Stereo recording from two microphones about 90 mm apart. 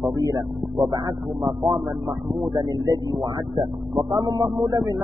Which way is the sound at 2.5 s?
40° right (ahead or behind).